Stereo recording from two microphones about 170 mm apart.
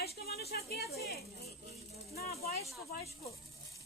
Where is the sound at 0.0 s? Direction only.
65° left (ahead or behind).